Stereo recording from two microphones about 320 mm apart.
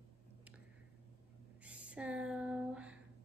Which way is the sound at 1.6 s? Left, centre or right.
Centre.